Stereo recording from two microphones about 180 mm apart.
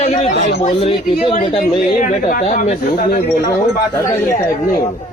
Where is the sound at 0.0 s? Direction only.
35° left (ahead or behind).